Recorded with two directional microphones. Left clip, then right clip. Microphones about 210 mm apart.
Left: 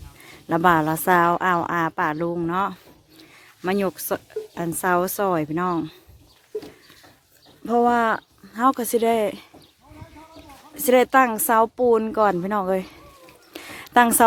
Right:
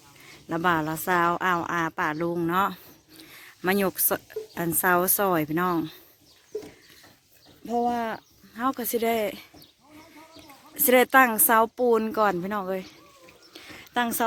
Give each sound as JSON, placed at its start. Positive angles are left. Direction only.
{"t": 0.3, "sound": "a woman's voice", "side_deg": 15}
{"t": 7.7, "sound": "a woman's voice", "side_deg": 20}
{"t": 10.8, "sound": "speech", "side_deg": 0}
{"t": 13.5, "sound": "a sound", "side_deg": 20}